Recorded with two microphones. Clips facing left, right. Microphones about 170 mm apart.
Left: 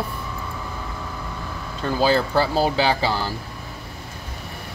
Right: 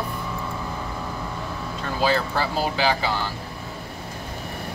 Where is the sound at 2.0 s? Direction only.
35° left (ahead or behind).